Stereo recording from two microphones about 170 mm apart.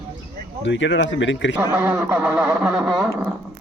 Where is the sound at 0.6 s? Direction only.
90° left.